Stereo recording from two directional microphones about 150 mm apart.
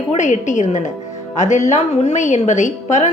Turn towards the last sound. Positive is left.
turn(degrees=55)  # may be behind; listen again after turning